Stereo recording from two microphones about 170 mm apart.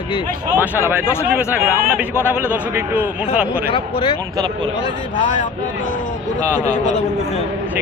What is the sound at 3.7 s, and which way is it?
Speech, 30° left (ahead or behind).